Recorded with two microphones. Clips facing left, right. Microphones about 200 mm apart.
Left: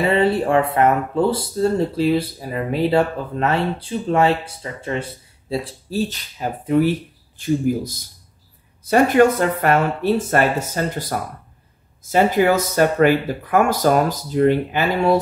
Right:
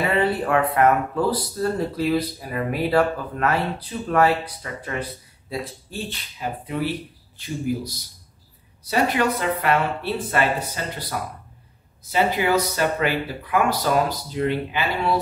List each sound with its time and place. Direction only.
0.0 s speech: 25° left (ahead or behind); by 15.1 s 45° left (ahead or behind)